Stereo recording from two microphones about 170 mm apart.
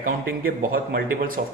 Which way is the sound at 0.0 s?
60° right (ahead or behind).